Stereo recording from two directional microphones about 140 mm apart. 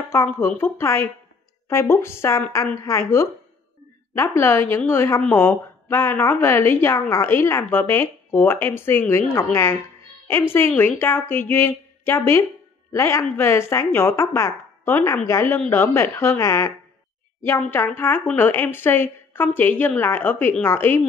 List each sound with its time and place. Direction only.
0.1 s a woman's voice: 15° left (ahead or behind)